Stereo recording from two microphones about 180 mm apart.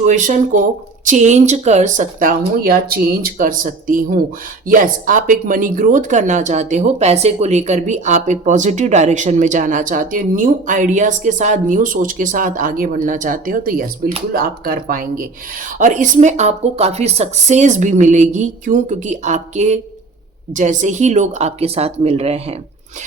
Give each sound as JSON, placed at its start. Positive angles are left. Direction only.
{"t": 0.0, "sound": "speech", "side_deg": -45}